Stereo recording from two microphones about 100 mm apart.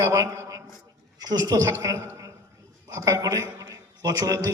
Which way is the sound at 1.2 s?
45° right (ahead or behind).